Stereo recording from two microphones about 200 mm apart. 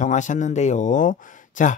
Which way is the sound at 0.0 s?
40° left (ahead or behind).